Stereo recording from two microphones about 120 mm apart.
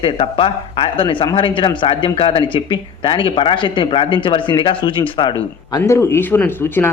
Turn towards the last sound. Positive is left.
turn(degrees=20)  # may be behind; listen again after turning